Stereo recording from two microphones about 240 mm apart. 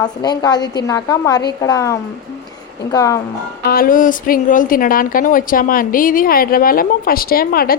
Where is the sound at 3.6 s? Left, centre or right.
Left.